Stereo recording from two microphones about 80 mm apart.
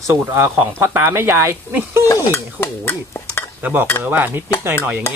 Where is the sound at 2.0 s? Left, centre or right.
Left.